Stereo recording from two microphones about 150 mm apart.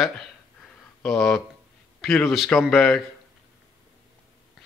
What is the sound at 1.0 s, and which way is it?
Speech, 5° left (ahead or behind).